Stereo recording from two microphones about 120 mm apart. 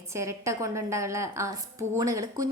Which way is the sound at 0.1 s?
25° right (ahead or behind).